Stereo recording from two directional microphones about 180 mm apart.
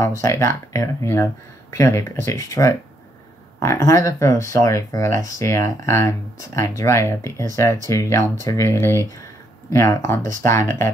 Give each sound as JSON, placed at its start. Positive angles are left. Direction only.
{"t": 0.0, "sound": "speech", "side_deg": 15}